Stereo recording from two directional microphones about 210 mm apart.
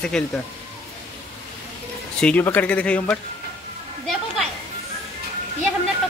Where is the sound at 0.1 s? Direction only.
Centre (ahead or behind).